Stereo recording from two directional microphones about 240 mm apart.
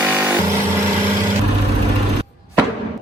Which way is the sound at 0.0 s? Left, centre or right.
Centre.